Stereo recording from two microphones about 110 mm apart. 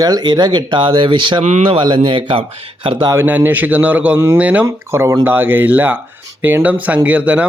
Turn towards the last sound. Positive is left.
turn(degrees=-10)  # may be behind; listen again after turning